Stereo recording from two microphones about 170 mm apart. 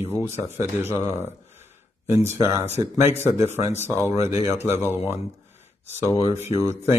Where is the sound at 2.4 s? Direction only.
20° right (ahead or behind).